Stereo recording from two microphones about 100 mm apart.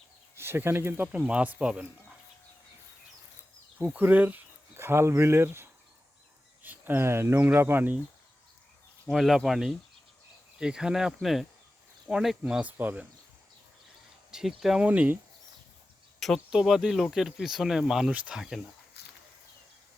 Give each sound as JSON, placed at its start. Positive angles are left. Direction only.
{"t": 0.3, "sound": "speech", "side_deg": -25}
{"t": 1.0, "sound": "speech", "side_deg": -10}
{"t": 3.8, "sound": "speech", "side_deg": -20}
{"t": 9.0, "sound": "speech", "side_deg": 0}
{"t": 14.3, "sound": "speech", "side_deg": -5}
{"t": 14.8, "sound": "speech", "side_deg": -15}
{"t": 16.2, "sound": "speech", "side_deg": 0}